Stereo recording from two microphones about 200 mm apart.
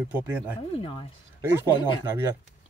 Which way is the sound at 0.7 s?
25° left (ahead or behind).